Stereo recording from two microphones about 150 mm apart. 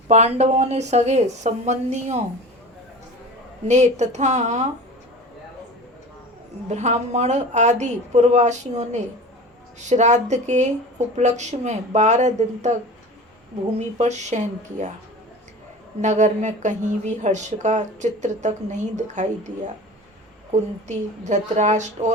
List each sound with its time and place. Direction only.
0.1 s speech: 45° right (ahead or behind)
3.7 s speech: 50° right (ahead or behind)
6.7 s speech: 50° right (ahead or behind)
13.7 s speech: 50° right (ahead or behind)
16.0 s speech: 50° right (ahead or behind)
20.8 s speech: 50° right (ahead or behind)